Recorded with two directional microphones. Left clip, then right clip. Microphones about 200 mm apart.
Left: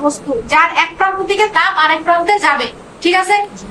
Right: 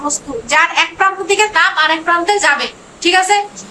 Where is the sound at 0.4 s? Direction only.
40° right (ahead or behind).